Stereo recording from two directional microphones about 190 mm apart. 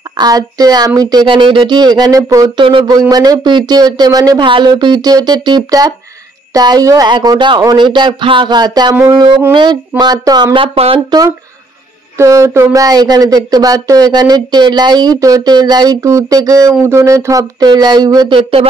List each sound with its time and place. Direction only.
0.2 s speech: 20° right (ahead or behind)